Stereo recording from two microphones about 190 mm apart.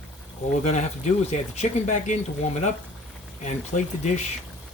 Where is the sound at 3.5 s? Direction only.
40° left (ahead or behind).